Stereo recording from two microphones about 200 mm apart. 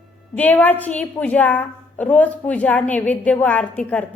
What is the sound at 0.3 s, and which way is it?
A woman's voice, 10° left (ahead or behind).